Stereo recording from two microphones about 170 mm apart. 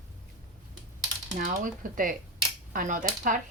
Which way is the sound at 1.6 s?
55° right (ahead or behind).